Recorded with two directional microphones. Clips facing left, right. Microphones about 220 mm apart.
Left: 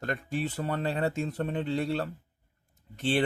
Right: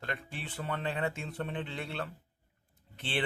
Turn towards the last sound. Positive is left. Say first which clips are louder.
# left 8 dB
turn(degrees=45)  # may be behind; listen again after turning